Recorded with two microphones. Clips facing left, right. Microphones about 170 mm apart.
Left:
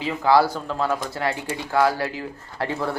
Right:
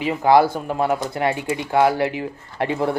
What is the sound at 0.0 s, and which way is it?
Speech, 20° right (ahead or behind).